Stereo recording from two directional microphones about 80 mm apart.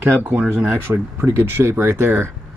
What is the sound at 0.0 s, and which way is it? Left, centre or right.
Speech, right.